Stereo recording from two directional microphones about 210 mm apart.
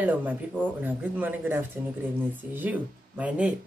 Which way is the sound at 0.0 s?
10° right (ahead or behind).